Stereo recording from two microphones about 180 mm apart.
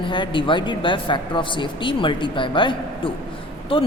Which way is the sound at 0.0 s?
25° left (ahead or behind).